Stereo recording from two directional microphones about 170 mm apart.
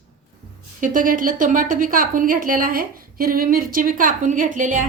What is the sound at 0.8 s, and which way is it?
A woman's voice, 50° right (ahead or behind).